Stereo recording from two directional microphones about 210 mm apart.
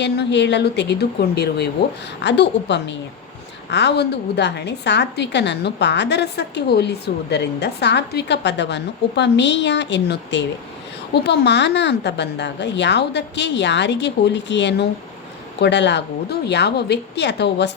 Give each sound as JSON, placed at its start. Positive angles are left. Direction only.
{"t": 0.0, "sound": "a woman's voice", "side_deg": 55}